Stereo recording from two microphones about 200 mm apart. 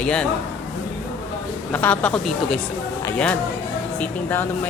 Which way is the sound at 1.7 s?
5° left (ahead or behind).